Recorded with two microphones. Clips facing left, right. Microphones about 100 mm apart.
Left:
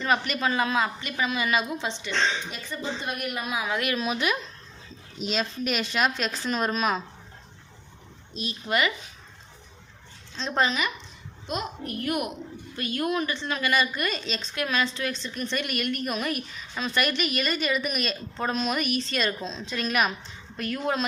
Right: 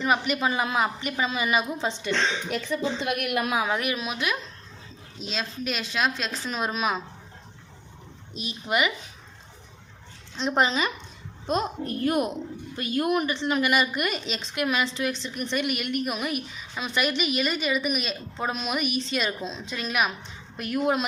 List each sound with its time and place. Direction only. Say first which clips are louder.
0.0 s speech: right 1 dB; 15° right (ahead or behind)
1.8 s a woman's voice: right 4 dB; 45° right (ahead or behind)
2.5 s a woman's voice: right 6 dB; 90° right; by 3.5 s 70° right (ahead or behind)
3.7 s speech: right 1 dB; 20° right (ahead or behind)
3.9 s a woman's voice: left 2 dB; centre (ahead or behind)
8.4 s a woman's voice: even; 15° right (ahead or behind)
10.3 s a child's voice: right 2 dB; 20° right (ahead or behind)
20.6 s a woman's voice: right 3 dB; 15° right (ahead or behind)